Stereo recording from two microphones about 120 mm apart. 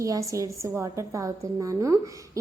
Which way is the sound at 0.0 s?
25° right (ahead or behind).